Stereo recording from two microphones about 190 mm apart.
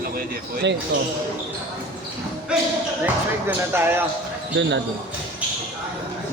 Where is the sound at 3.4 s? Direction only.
10° right (ahead or behind).